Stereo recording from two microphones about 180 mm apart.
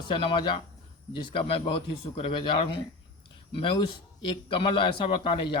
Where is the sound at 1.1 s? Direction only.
30° left (ahead or behind).